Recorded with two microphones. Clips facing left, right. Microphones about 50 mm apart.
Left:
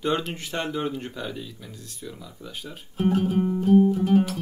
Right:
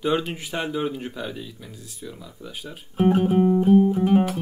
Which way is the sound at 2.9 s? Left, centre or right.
Right.